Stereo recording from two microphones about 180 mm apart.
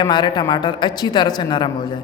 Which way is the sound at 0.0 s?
25° left (ahead or behind).